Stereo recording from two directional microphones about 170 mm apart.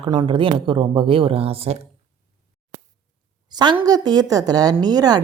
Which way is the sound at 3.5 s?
25° right (ahead or behind).